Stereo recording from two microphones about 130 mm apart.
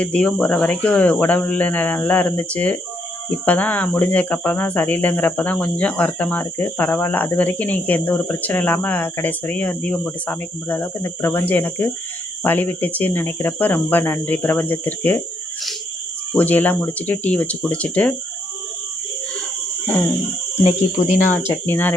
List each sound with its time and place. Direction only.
0.0 s speech: 10° left (ahead or behind)
16.3 s speech: 10° left (ahead or behind)
21.1 s speech: 75° left (ahead or behind)
21.7 s speech: 15° left (ahead or behind)